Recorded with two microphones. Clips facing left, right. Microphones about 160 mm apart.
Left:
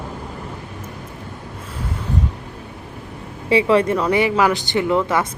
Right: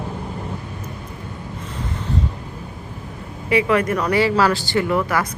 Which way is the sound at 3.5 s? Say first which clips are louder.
Left 2 dB; 30° left (ahead or behind).